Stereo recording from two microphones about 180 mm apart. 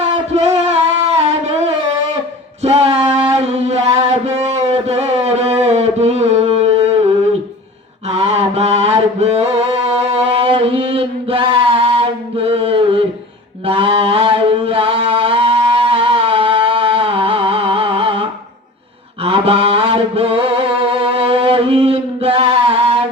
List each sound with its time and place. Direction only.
0.3 s a sound: 40° right (ahead or behind)
2.6 s mantra: 35° right (ahead or behind)
19.2 s chant: 30° right (ahead or behind)